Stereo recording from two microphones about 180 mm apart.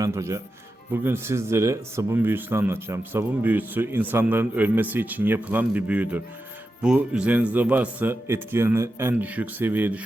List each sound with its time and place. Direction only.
0.0 s speech: 15° right (ahead or behind)